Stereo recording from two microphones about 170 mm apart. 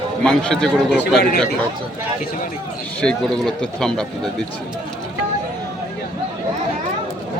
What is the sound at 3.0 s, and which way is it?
Speech, 5° left (ahead or behind).